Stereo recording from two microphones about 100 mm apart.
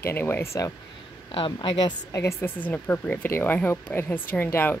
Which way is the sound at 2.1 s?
30° left (ahead or behind).